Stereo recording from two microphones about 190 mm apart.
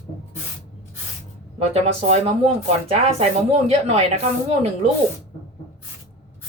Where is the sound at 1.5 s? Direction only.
35° right (ahead or behind).